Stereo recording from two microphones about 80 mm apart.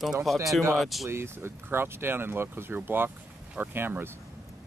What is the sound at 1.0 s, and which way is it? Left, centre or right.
Speech, right.